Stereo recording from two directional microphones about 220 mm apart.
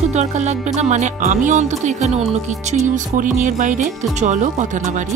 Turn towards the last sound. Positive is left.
turn(degrees=-35)  # may be behind; listen again after turning